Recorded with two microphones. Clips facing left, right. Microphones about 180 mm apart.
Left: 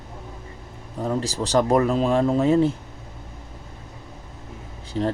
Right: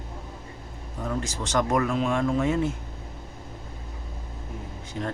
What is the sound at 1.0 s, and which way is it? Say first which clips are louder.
Speech: left 5 dB; 35° left (ahead or behind).